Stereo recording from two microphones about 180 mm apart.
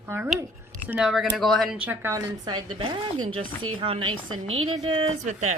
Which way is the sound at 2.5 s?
30° right (ahead or behind).